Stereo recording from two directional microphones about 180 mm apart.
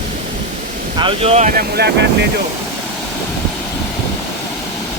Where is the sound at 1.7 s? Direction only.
65° right (ahead or behind).